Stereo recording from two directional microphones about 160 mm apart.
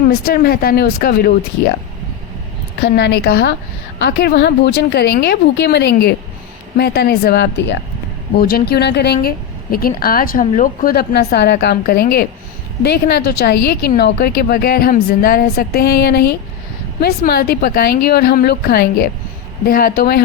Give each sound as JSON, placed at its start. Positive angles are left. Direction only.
{"t": 0.1, "sound": "a woman's voice", "side_deg": 75}
{"t": 2.8, "sound": "a woman's voice", "side_deg": 80}
{"t": 8.4, "sound": "a woman's voice", "side_deg": 70}
{"t": 9.7, "sound": "a woman's voice", "side_deg": 65}
{"t": 10.4, "sound": "speech", "side_deg": 45}
{"t": 10.8, "sound": "a woman's voice", "side_deg": 85}
{"t": 12.8, "sound": "a woman's voice", "side_deg": 90}
{"t": 17.0, "sound": "a woman's voice", "side_deg": 70}